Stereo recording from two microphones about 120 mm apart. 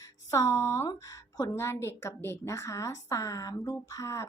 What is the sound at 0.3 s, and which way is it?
A woman's voice, 25° left (ahead or behind).